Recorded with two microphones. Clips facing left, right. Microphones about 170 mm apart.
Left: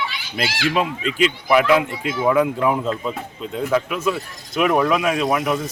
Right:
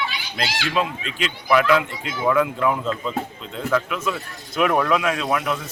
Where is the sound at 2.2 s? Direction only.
20° left (ahead or behind).